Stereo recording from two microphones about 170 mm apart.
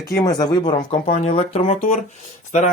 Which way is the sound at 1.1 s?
40° left (ahead or behind).